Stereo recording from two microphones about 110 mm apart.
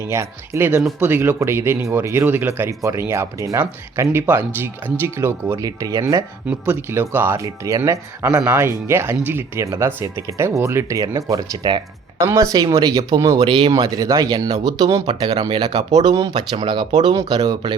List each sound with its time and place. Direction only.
0.0 s speech: 25° right (ahead or behind)
6.5 s speech: 20° right (ahead or behind)
11.3 s speech: 40° right (ahead or behind)
12.2 s speech: 30° right (ahead or behind)